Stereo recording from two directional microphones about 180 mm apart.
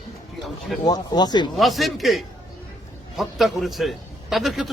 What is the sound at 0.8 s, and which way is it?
Speech, 20° left (ahead or behind).